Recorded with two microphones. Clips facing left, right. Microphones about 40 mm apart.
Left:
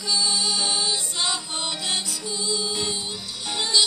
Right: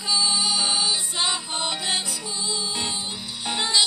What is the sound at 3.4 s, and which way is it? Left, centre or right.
Music, right.